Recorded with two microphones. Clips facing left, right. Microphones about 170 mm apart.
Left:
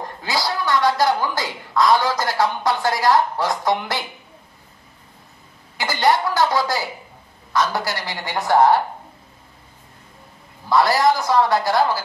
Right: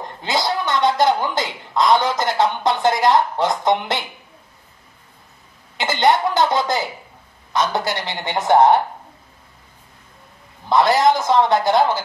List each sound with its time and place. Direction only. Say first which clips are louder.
0.2 s a woman's voice: right 3 dB; 20° right (ahead or behind)
5.8 s a woman's voice: right 2 dB; 20° right (ahead or behind)
10.7 s a woman's voice: right 2 dB; 20° right (ahead or behind)